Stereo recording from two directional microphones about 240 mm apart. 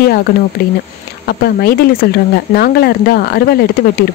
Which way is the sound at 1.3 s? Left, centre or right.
Left.